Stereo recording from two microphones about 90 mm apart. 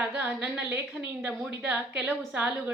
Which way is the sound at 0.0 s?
15° right (ahead or behind).